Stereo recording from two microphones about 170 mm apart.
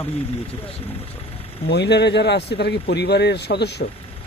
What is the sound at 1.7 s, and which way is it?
A man's voice, 85° left.